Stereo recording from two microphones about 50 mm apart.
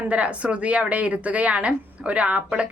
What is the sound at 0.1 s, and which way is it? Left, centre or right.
A woman's voice, right.